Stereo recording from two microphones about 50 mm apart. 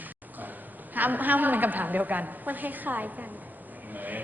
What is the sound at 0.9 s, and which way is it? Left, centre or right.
A woman's voice, right.